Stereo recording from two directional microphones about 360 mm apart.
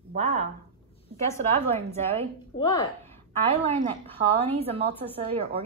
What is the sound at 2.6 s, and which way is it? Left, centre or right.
Speech, centre.